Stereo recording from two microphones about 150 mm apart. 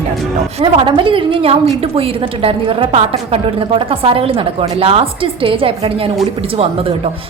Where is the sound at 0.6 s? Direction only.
35° right (ahead or behind).